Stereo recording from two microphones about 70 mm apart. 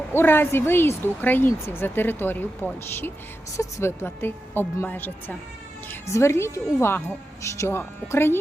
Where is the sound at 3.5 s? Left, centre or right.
Left.